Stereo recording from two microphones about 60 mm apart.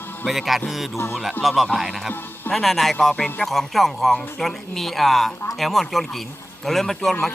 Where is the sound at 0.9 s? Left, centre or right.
Left.